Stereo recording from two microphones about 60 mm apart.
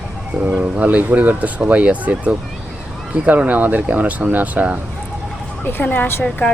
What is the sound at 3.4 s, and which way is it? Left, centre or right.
Speech, right.